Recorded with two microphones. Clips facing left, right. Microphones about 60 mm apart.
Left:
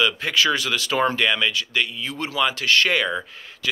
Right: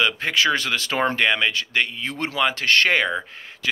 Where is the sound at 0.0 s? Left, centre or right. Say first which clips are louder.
Even; right.